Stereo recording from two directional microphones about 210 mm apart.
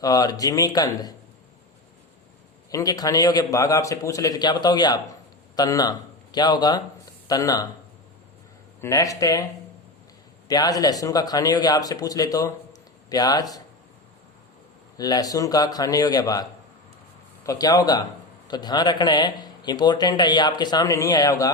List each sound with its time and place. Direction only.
0.0 s a man's voice: 15° left (ahead or behind)
2.6 s a man's voice: 15° left (ahead or behind)
8.8 s a man's voice: 15° left (ahead or behind)
10.5 s a man's voice: 20° left (ahead or behind)
14.9 s a man's voice: 15° left (ahead or behind)